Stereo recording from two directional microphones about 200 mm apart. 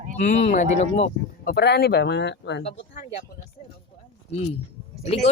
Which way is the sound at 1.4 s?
55° left (ahead or behind).